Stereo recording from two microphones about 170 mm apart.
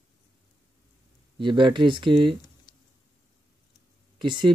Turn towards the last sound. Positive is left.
turn(degrees=-30)  # may be behind; listen again after turning